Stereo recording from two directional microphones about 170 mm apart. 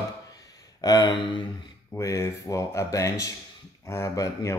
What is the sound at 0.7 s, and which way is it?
Speech, 25° left (ahead or behind).